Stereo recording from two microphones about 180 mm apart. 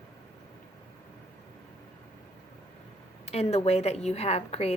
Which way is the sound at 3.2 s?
35° left (ahead or behind).